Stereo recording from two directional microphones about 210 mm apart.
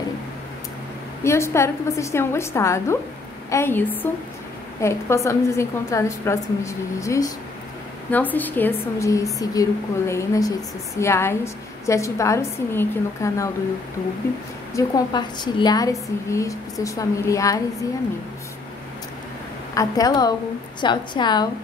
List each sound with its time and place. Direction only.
1.2 s a woman's voice: 15° left (ahead or behind)
14.7 s a woman's voice: 15° left (ahead or behind)
19.7 s a woman's voice: 15° left (ahead or behind)